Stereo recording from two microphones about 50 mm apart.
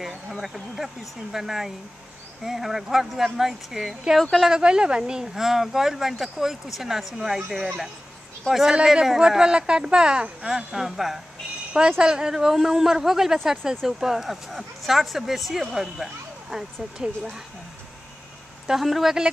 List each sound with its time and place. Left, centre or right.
0.3 s speech: centre
4.2 s speech: centre
4.5 s speech: centre
10.4 s speech: centre
12.0 s speech: centre
18.7 s speech: centre